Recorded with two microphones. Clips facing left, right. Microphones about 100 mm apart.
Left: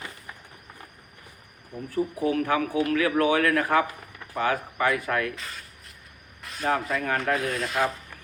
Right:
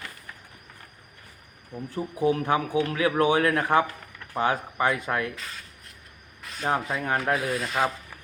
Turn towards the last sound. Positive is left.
turn(degrees=0)  # may be behind; listen again after turning